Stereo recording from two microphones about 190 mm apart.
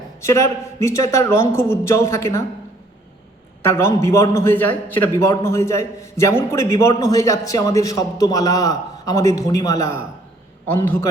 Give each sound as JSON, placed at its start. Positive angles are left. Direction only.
{"t": 0.2, "sound": "a man's voice", "side_deg": 15}
{"t": 3.6, "sound": "a man's voice", "side_deg": 15}